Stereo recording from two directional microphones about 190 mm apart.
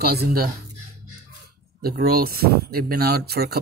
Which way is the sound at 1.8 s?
55° right (ahead or behind).